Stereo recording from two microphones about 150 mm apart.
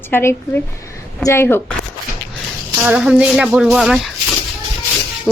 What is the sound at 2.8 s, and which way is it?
Speech, 10° right (ahead or behind).